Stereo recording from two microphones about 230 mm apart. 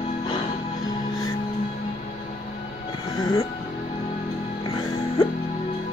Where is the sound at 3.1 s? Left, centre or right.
Centre.